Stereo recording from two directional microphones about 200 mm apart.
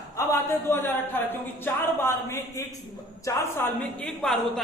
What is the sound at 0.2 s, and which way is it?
A man's voice, 15° left (ahead or behind).